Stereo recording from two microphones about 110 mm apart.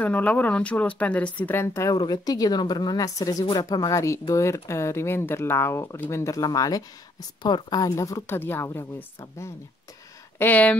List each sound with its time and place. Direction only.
0.0 s speech: 15° left (ahead or behind)
2.0 s speech: 35° left (ahead or behind); by 8.8 s 20° left (ahead or behind)
10.4 s speech: 15° left (ahead or behind)